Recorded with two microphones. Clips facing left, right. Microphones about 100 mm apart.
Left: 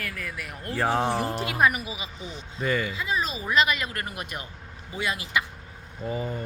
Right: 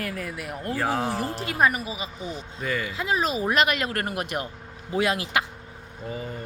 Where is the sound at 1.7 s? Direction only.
40° right (ahead or behind).